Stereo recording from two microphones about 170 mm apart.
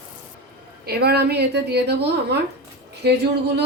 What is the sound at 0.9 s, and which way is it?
A woman's voice, 70° right (ahead or behind).